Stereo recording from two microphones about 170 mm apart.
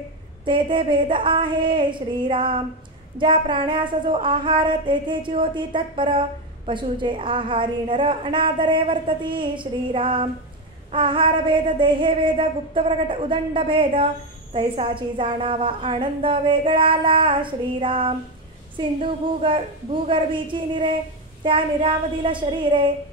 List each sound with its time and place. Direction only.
0.5 s child singing: 30° right (ahead or behind)
10.9 s a sound: 30° right (ahead or behind)
18.8 s child singing: 30° right (ahead or behind)